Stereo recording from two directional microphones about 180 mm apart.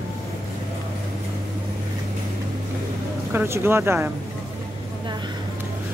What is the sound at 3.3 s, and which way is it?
Speech, 10° right (ahead or behind).